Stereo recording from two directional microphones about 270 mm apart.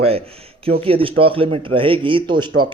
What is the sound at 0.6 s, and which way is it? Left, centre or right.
Speech, right.